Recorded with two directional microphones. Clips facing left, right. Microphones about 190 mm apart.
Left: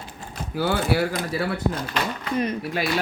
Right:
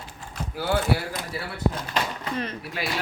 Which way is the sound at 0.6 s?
90° left.